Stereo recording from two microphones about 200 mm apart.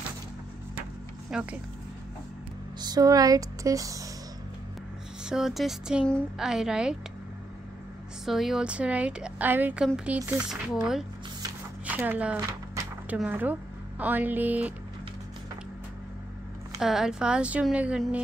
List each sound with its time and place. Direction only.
1.3 s speech: 5° right (ahead or behind)
2.8 s speech: 20° right (ahead or behind)
5.2 s a woman's voice: centre (ahead or behind)
8.3 s a woman's voice: centre (ahead or behind)
16.8 s a woman's voice: centre (ahead or behind)